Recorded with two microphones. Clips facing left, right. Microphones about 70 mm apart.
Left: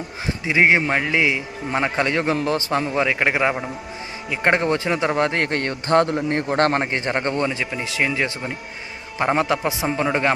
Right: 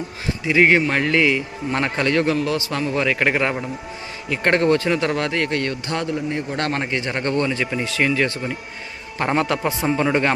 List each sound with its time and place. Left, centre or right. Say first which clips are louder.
0.4 s a man's voice: right 1 dB; centre
2.3 s a man's voice: left 1 dB; left
2.9 s a man's voice: right 3 dB; centre; by 6.6 s left
6.6 s a man's voice: left 5 dB; left; by 7.6 s centre
7.6 s a man's voice: right 2 dB; centre